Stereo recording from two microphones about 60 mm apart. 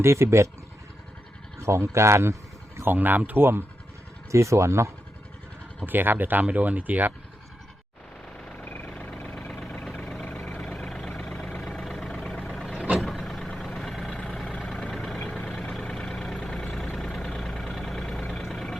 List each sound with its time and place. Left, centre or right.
0.0 s speech: right
1.5 s speech: right
2.9 s speech: right
3.4 s speech: right
4.3 s speech: right
5.8 s speech: right
8.5 s vehicle: left
8.9 s vehicle: left
15.2 s vehicle: left; by 18.8 s centre